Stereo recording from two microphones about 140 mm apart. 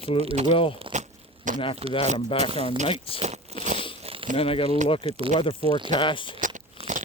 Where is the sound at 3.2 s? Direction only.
55° right (ahead or behind).